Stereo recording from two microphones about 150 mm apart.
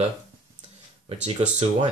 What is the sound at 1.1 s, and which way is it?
Speech, 45° right (ahead or behind).